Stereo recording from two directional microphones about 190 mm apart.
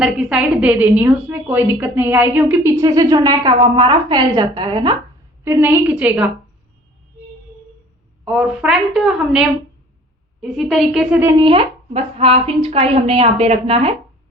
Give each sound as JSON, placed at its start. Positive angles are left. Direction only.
{"t": 0.0, "sound": "a woman's voice", "side_deg": -5}
{"t": 5.5, "sound": "a woman's voice", "side_deg": -10}
{"t": 8.2, "sound": "a woman's voice", "side_deg": -5}
{"t": 11.2, "sound": "a woman's voice", "side_deg": -15}
{"t": 11.4, "sound": "speech", "side_deg": -30}